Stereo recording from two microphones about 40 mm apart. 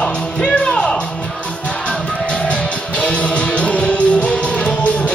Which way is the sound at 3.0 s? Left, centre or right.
Left.